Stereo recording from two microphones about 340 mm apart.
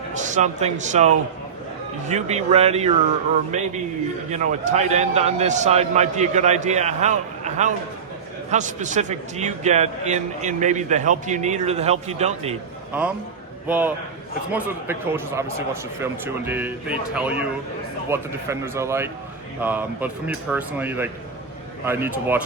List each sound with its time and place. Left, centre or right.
0.1 s a man's voice: right
12.9 s a man's voice: centre